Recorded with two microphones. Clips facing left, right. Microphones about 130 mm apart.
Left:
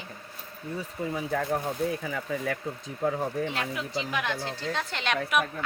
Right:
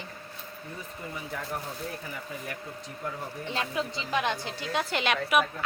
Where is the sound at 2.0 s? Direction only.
90° left.